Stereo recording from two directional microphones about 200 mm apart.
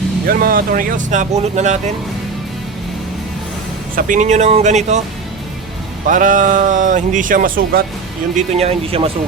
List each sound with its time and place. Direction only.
0.3 s speech: 45° right (ahead or behind)
3.9 s speech: 40° right (ahead or behind)
6.1 s speech: 40° right (ahead or behind)
8.4 s speech: 30° right (ahead or behind)